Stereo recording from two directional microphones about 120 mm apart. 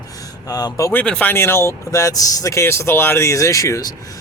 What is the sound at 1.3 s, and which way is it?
Speech, 20° left (ahead or behind).